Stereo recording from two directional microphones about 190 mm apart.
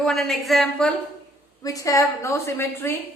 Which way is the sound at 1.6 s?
15° left (ahead or behind).